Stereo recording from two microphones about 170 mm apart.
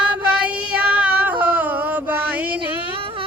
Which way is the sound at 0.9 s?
10° right (ahead or behind).